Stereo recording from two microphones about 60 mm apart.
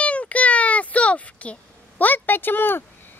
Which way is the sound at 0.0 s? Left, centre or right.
Left.